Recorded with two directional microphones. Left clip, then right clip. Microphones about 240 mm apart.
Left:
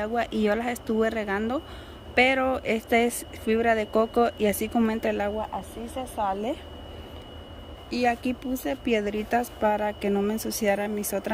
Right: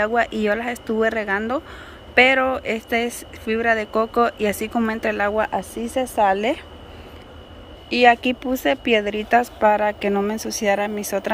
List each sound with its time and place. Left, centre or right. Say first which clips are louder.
0.0 s speech: right 7 dB; centre
6.1 s a woman's voice: right 10 dB; right
8.0 s speech: right 11 dB; centre